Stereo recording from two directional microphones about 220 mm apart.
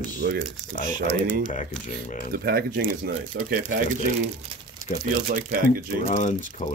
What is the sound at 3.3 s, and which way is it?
Speech, 50° right (ahead or behind).